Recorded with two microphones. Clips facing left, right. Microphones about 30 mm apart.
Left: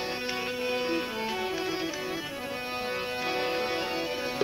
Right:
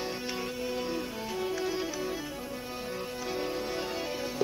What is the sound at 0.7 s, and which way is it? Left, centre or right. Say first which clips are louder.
Music: left 6 dB; left.